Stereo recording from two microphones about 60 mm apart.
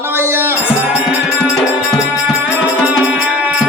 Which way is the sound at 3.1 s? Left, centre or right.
Right.